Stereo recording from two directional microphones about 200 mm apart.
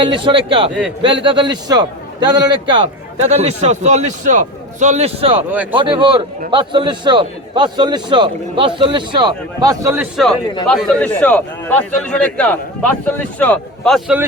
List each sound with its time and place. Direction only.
0.0 s a man's voice: 25° right (ahead or behind)
10.7 s a man's voice: 5° left (ahead or behind)